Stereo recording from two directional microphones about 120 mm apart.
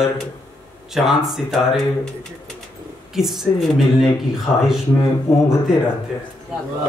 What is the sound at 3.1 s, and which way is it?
Mantra, centre (ahead or behind).